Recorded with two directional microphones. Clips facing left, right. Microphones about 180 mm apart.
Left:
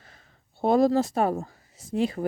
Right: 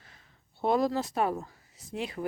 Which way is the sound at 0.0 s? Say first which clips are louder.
Left 4 dB; 45° left (ahead or behind).